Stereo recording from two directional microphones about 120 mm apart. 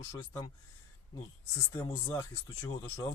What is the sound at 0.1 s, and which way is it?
Speech, 30° left (ahead or behind).